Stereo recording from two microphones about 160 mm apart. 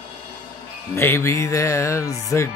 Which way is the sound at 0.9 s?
15° left (ahead or behind).